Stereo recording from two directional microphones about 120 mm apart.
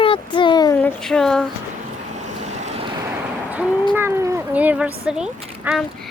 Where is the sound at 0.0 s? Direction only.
45° left (ahead or behind).